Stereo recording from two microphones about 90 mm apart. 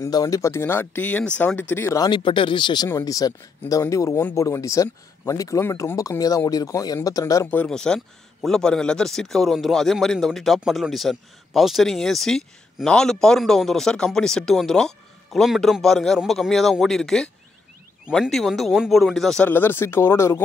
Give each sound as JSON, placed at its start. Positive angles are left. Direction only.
{"t": 0.0, "sound": "speech", "side_deg": 40}
{"t": 2.0, "sound": "speech", "side_deg": 60}
{"t": 2.9, "sound": "speech", "side_deg": 35}
{"t": 7.5, "sound": "speech", "side_deg": 10}
{"t": 18.3, "sound": "speech", "side_deg": 0}
{"t": 19.4, "sound": "speech", "side_deg": 25}